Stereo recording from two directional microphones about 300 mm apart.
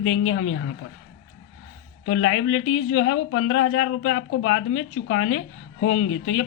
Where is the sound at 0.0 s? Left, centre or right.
Left.